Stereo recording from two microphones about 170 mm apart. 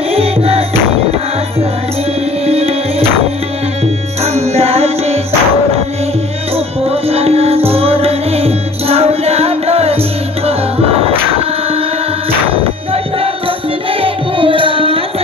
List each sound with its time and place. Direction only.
0.1 s music: 35° right (ahead or behind)
2.4 s music: 35° right (ahead or behind)
6.5 s music: 35° right (ahead or behind)
14.0 s music: 30° right (ahead or behind)